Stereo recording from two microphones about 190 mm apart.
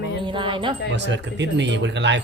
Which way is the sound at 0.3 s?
25° right (ahead or behind).